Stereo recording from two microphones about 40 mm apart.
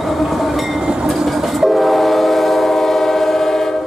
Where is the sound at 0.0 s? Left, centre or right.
Centre.